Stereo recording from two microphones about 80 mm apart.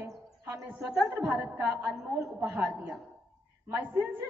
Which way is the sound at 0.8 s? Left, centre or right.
Centre.